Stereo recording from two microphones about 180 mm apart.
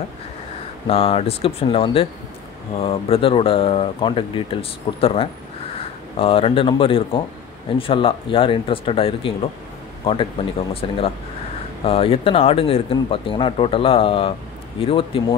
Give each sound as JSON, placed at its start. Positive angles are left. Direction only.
{"t": 0.8, "sound": "speech", "side_deg": 30}
{"t": 10.7, "sound": "speech", "side_deg": 30}